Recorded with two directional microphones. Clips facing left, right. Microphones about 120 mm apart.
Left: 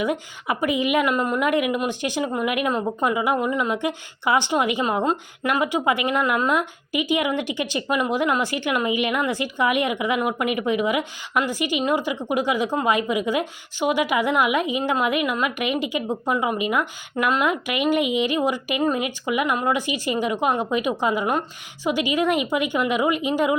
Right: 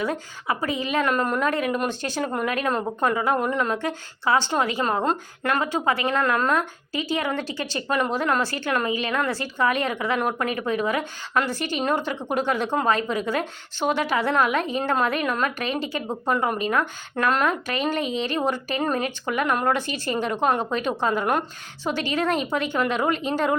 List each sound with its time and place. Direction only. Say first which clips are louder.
0.0 s speech: left 2 dB; 20° left (ahead or behind)